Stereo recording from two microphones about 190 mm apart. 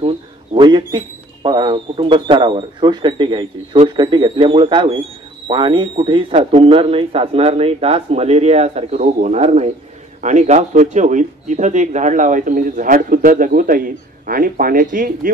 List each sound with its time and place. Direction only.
0.0 s a man's voice: 30° right (ahead or behind); by 15.3 s 45° right (ahead or behind)